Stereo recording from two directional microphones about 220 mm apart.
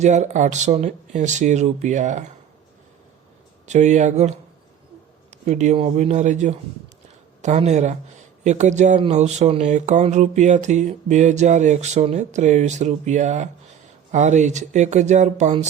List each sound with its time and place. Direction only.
0.0 s speech: 30° right (ahead or behind)
3.7 s speech: 30° right (ahead or behind)
5.5 s speech: 30° right (ahead or behind)